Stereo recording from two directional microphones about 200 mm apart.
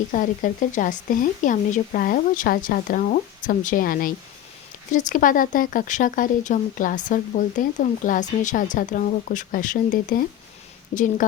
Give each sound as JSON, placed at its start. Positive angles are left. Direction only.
{"t": 0.1, "sound": "speech", "side_deg": 40}